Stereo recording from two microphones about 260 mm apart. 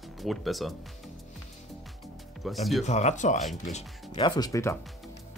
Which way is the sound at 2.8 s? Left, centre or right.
Left.